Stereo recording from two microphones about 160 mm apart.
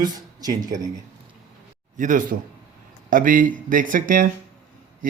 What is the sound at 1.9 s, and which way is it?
A man's voice, 55° right (ahead or behind).